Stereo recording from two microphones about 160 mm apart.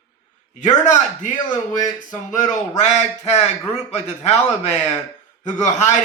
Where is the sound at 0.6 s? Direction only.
50° left (ahead or behind).